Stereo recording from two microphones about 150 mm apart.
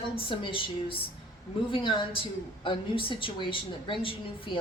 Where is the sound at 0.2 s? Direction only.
35° left (ahead or behind).